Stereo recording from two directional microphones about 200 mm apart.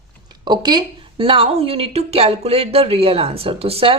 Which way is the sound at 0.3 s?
20° right (ahead or behind).